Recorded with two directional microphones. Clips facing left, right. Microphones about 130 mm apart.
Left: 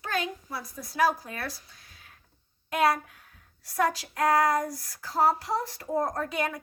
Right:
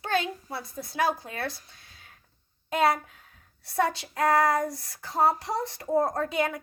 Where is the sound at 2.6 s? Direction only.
25° right (ahead or behind).